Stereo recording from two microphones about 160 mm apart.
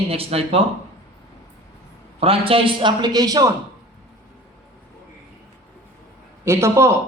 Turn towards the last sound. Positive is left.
turn(degrees=-15)  # may be behind; listen again after turning